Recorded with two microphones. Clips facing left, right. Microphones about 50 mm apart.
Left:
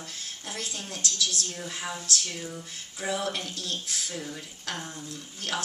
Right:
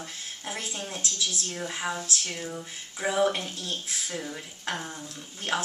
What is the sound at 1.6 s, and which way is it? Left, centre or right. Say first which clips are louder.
A woman's voice: right 4 dB; centre.